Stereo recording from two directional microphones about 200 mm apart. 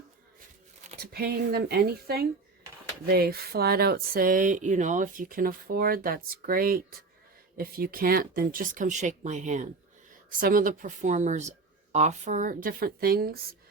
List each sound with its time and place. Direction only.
1.0 s speech: 50° right (ahead or behind)